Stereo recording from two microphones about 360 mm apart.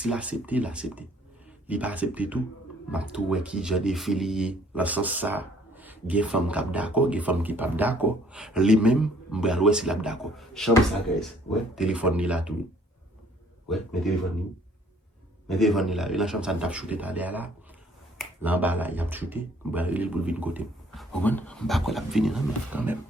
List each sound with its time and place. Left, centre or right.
0.0 s speech: centre
11.7 s speech: centre
13.7 s speech: centre
15.4 s speech: centre